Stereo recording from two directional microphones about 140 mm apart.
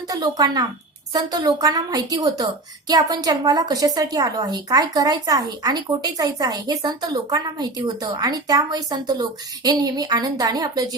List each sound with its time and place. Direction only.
0.1 s a woman's voice: 25° right (ahead or behind)